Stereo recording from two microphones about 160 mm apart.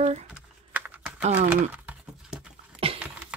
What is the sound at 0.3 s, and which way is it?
Typing, 10° right (ahead or behind).